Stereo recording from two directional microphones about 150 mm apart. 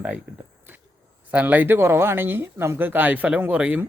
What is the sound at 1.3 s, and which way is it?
Speech, 10° right (ahead or behind).